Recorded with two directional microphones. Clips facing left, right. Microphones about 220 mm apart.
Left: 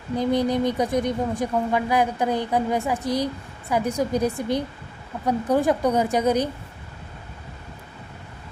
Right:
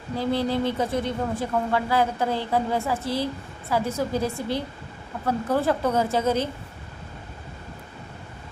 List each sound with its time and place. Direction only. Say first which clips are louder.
0.2 s speech: left 3 dB; 15° left (ahead or behind)